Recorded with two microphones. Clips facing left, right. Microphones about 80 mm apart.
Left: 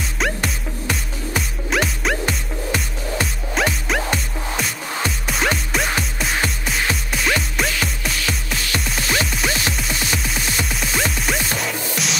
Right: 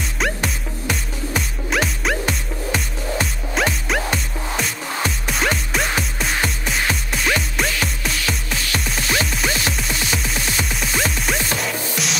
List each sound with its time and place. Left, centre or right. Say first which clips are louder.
0.2 s music: even; centre